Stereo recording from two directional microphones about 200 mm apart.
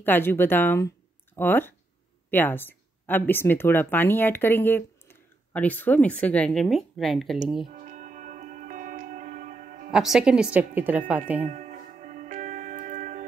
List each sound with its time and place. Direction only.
0.0 s speech: 10° left (ahead or behind)
7.7 s music: 40° right (ahead or behind)
9.8 s speech: 5° right (ahead or behind)
11.4 s music: 40° right (ahead or behind)